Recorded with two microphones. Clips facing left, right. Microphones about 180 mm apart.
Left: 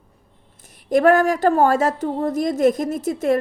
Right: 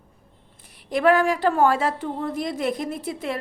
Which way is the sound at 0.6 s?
45° left (ahead or behind).